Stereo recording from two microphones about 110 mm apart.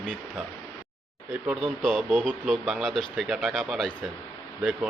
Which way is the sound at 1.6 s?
5° left (ahead or behind).